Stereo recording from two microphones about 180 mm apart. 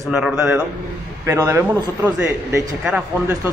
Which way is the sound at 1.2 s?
15° right (ahead or behind).